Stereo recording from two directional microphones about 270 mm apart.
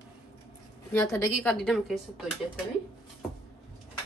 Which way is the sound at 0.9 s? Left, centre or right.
Centre.